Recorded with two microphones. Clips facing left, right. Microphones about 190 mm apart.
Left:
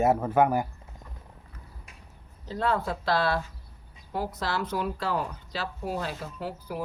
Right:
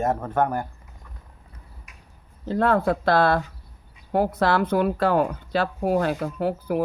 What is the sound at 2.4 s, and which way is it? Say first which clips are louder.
A woman's voice: right 7 dB; 55° right (ahead or behind).